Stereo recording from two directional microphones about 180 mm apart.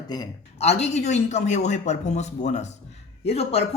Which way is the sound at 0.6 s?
35° left (ahead or behind).